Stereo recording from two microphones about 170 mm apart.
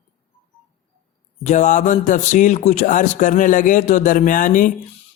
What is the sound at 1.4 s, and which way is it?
Speech, 45° left (ahead or behind).